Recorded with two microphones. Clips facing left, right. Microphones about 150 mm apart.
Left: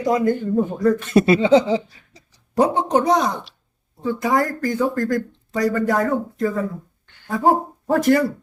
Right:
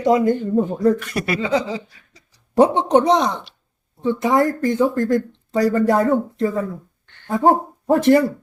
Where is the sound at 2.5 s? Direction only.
20° right (ahead or behind).